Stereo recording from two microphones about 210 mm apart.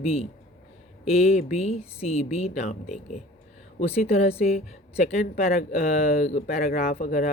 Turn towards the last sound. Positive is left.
turn(degrees=40)  # may be behind; listen again after turning